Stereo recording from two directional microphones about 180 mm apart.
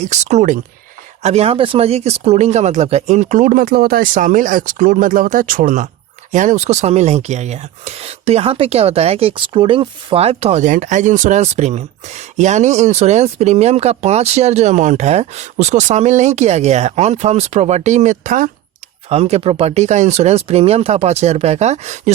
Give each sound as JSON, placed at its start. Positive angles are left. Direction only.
{"t": 0.0, "sound": "speech", "side_deg": -40}
{"t": 19.0, "sound": "speech", "side_deg": -35}